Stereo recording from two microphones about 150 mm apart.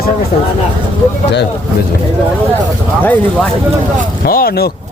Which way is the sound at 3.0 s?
10° left (ahead or behind).